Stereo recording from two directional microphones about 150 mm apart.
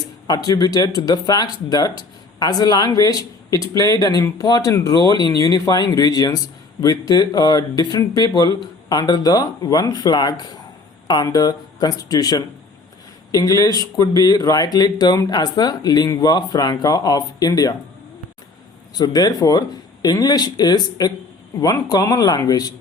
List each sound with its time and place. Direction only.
0.3 s speech: 25° left (ahead or behind)
18.9 s speech: 25° left (ahead or behind)